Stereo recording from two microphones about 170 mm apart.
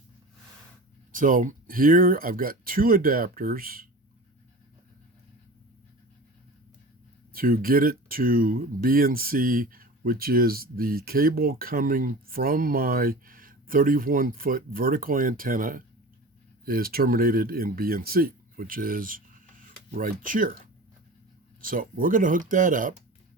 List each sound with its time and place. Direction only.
1.1 s speech: 50° right (ahead or behind)
7.3 s speech: 60° right (ahead or behind)
21.6 s speech: 55° right (ahead or behind)